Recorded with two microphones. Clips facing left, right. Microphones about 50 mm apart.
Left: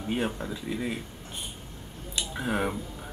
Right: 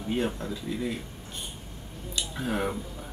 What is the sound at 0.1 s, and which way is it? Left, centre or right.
Speech, centre.